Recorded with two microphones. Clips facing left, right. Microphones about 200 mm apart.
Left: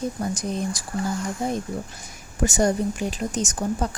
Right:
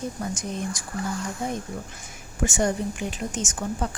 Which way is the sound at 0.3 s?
35° left (ahead or behind).